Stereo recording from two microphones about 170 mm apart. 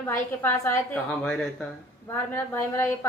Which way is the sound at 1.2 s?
Centre (ahead or behind).